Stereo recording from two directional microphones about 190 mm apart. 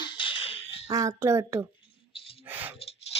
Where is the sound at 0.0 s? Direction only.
25° left (ahead or behind).